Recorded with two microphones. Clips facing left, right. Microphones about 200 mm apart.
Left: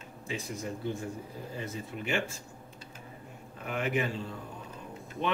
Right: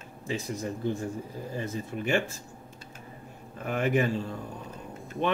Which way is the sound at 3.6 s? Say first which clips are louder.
Right 5 dB; 45° right (ahead or behind).